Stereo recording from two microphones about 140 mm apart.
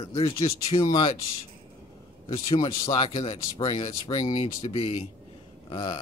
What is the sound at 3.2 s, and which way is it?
A man's voice, 35° left (ahead or behind).